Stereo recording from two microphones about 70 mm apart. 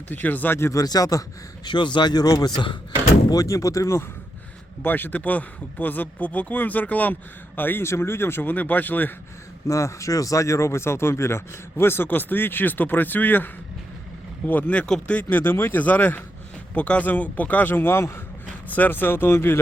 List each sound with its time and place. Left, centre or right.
0.1 s speech: left
0.7 s speech: left
1.6 s a man's voice: left
4.8 s speech: left
9.6 s speech: left; by 15.1 s centre
15.1 s speech: left
18.7 s speech: left